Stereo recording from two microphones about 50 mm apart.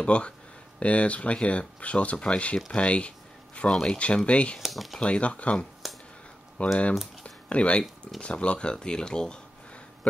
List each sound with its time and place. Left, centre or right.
0.0 s speech: left
4.6 s speech: centre
5.0 s speech: left
7.2 s a sound: left
8.2 s speech: left